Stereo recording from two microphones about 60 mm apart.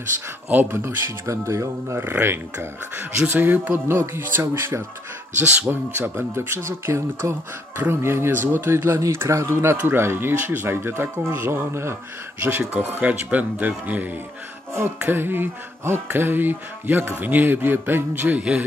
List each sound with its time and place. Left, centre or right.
0.5 s speech: right
0.7 s speech: right
2.0 s speech: right
12.4 s speech: right